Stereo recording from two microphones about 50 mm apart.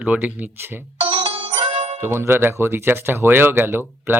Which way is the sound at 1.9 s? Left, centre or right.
Right.